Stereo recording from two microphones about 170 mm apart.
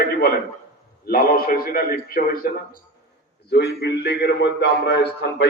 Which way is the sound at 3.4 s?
75° left (ahead or behind).